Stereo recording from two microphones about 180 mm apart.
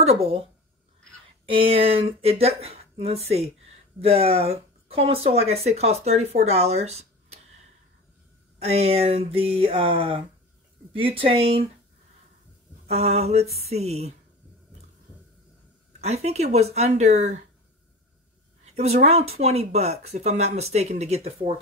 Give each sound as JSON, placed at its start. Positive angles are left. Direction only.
{"t": 0.0, "sound": "speech", "side_deg": -35}
{"t": 1.4, "sound": "speech", "side_deg": -30}
{"t": 8.6, "sound": "speech", "side_deg": -35}
{"t": 12.8, "sound": "speech", "side_deg": -35}
{"t": 16.0, "sound": "speech", "side_deg": -35}
{"t": 18.8, "sound": "speech", "side_deg": -35}